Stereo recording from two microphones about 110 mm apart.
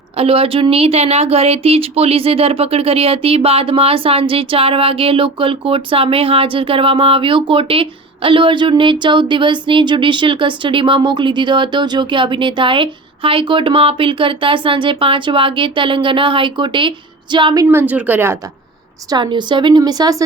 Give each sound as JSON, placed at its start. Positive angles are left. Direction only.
{"t": 0.2, "sound": "a woman's voice", "side_deg": -60}
{"t": 17.7, "sound": "speech", "side_deg": -20}
{"t": 19.1, "sound": "speech", "side_deg": -45}